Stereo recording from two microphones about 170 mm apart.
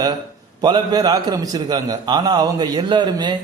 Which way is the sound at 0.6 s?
25° right (ahead or behind).